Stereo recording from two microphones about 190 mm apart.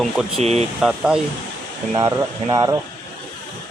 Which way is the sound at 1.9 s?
20° right (ahead or behind).